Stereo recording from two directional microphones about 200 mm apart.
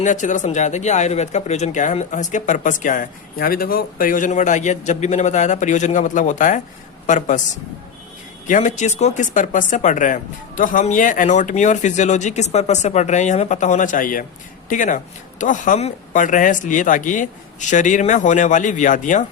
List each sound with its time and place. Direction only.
0.0 s speech: 40° left (ahead or behind)
8.4 s speech: 40° left (ahead or behind)